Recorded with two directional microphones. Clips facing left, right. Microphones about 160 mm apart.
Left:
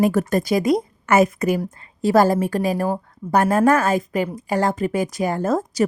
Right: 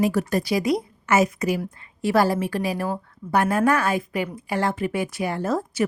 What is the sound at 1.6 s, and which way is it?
A woman's voice, 40° left (ahead or behind).